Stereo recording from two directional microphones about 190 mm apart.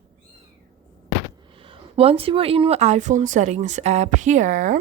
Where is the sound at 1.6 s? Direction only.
30° right (ahead or behind).